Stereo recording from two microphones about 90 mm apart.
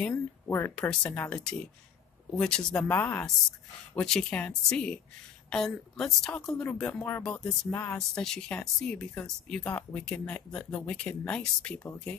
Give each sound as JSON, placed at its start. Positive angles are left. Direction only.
{"t": 0.5, "sound": "speech", "side_deg": 25}
{"t": 0.7, "sound": "speech", "side_deg": 10}
{"t": 2.9, "sound": "speech", "side_deg": 20}
{"t": 3.9, "sound": "speech", "side_deg": 10}
{"t": 7.2, "sound": "speech", "side_deg": 5}
{"t": 7.7, "sound": "speech", "side_deg": 15}
{"t": 8.1, "sound": "speech", "side_deg": 5}